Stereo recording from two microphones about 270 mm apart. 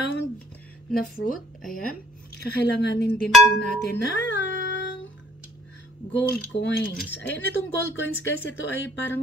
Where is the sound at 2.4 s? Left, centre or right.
Left.